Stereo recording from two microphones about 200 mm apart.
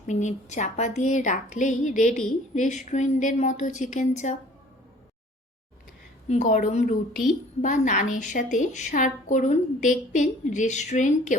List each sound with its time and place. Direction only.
0.1 s a woman's voice: 35° left (ahead or behind)
6.2 s a woman's voice: 35° left (ahead or behind)